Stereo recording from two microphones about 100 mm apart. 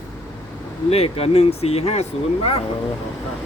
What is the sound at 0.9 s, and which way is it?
Speech, 90° left.